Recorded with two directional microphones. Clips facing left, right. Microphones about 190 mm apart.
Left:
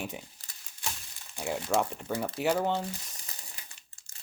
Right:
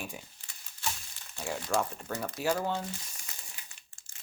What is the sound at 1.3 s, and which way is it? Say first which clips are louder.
Speech: left 3 dB; 15° left (ahead or behind).